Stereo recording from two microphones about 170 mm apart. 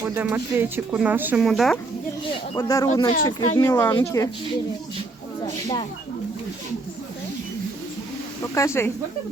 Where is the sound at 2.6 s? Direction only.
20° left (ahead or behind).